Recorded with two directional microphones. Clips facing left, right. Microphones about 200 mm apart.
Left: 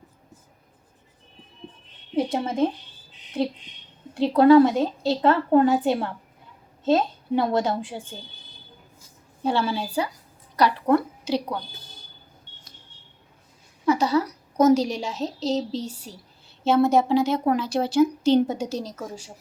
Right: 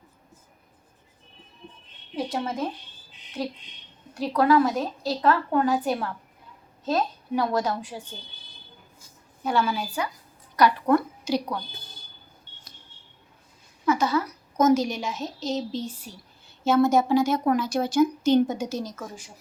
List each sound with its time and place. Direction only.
2.1 s a woman's voice: 25° left (ahead or behind)
4.1 s a woman's voice: 30° left (ahead or behind)
9.4 s a woman's voice: 30° left (ahead or behind)
13.8 s a sound: 35° left (ahead or behind)
14.6 s speech: 35° left (ahead or behind)